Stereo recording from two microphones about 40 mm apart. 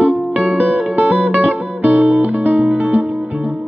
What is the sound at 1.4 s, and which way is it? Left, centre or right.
Music, right.